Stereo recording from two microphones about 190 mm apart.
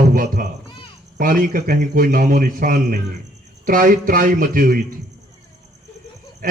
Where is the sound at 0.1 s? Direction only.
45° right (ahead or behind).